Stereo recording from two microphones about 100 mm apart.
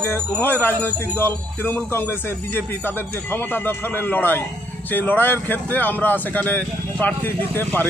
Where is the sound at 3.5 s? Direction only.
20° left (ahead or behind).